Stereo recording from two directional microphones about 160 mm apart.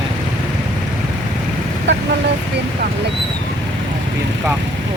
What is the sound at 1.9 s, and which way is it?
Speech, 90° right.